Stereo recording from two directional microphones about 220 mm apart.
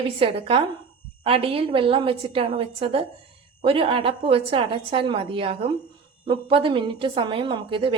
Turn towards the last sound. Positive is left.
turn(degrees=-20)  # may be behind; listen again after turning